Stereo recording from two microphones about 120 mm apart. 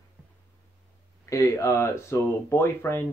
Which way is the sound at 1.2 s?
25° left (ahead or behind).